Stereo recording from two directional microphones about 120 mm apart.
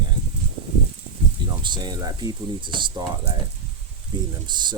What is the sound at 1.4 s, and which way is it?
Speech, 40° right (ahead or behind).